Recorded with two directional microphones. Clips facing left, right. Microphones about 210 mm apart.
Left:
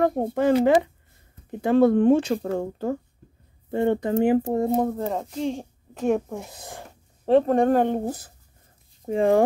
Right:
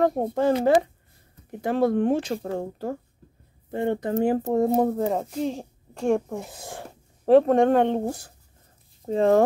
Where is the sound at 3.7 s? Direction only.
30° left (ahead or behind).